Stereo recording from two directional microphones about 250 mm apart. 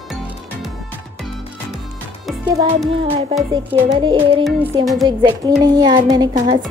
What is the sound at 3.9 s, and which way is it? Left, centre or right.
Music, centre.